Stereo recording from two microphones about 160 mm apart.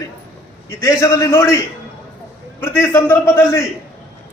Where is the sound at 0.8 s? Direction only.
20° left (ahead or behind).